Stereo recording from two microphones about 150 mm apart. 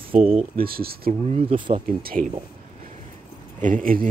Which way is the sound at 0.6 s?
80° right.